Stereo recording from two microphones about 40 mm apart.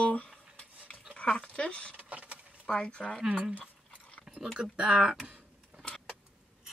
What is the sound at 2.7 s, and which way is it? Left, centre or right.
Speech, left.